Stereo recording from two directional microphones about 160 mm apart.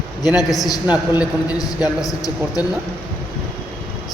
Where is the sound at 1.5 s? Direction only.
25° left (ahead or behind).